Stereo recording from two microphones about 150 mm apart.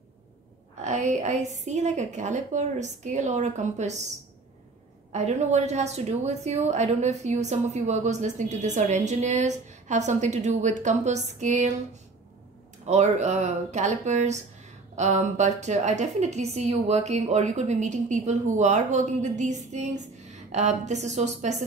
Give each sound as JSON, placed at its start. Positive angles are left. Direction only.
{"t": 0.8, "sound": "a woman's voice", "side_deg": -50}
{"t": 5.1, "sound": "a woman's voice", "side_deg": -50}
{"t": 12.8, "sound": "a woman's voice", "side_deg": -50}